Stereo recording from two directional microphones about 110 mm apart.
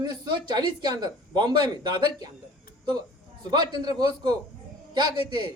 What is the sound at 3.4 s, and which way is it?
A man's voice, 40° right (ahead or behind).